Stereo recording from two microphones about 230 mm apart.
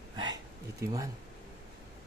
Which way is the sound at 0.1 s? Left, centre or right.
Centre.